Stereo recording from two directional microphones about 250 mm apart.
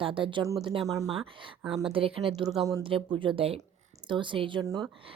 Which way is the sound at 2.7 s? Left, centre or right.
Centre.